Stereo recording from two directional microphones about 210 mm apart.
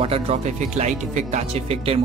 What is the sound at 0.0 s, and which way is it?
Speech, 30° right (ahead or behind).